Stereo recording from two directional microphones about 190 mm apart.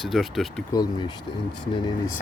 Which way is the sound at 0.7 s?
20° left (ahead or behind).